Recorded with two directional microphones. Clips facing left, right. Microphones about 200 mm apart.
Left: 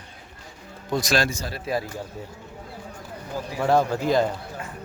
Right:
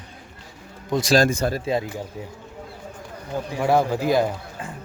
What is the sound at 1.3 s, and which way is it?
Speech, 60° right (ahead or behind).